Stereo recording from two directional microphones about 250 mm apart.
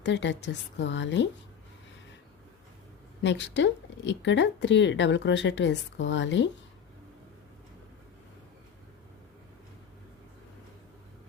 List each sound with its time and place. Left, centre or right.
0.0 s speech: left
3.2 s speech: left